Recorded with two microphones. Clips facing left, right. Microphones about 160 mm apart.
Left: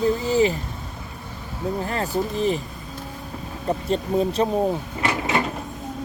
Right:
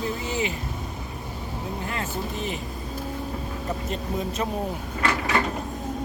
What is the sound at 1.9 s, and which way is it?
Speech, 35° left (ahead or behind).